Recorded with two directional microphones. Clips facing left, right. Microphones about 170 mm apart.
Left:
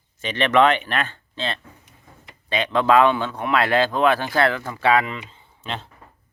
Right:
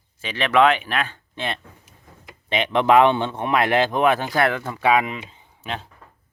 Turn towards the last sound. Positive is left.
turn(degrees=-10)  # may be behind; listen again after turning